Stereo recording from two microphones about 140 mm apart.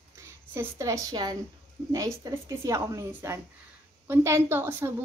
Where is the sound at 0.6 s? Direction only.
20° right (ahead or behind).